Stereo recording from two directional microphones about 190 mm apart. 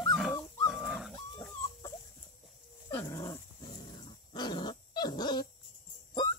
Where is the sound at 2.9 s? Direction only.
15° left (ahead or behind).